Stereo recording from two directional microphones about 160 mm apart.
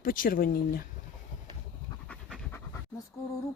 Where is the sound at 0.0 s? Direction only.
65° left (ahead or behind).